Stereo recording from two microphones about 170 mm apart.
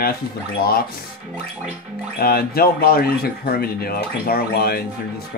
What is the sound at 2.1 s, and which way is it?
Speech, 65° left (ahead or behind).